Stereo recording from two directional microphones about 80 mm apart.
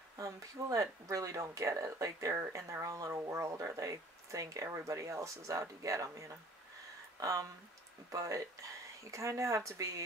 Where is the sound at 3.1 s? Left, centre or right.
Right.